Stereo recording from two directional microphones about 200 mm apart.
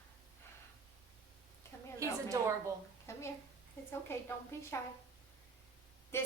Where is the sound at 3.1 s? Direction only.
15° left (ahead or behind).